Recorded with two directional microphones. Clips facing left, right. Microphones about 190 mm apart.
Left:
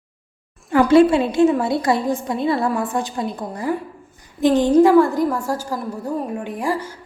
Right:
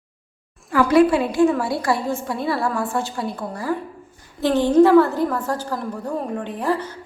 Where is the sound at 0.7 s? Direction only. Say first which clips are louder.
Left 3 dB; 25° left (ahead or behind).